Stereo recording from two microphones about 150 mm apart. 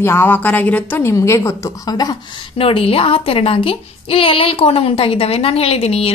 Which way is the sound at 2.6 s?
40° left (ahead or behind).